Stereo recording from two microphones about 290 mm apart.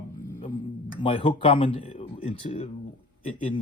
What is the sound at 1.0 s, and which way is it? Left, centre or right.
Speech, centre.